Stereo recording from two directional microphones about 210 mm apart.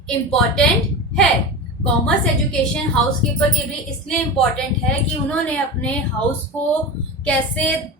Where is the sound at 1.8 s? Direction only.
5° left (ahead or behind).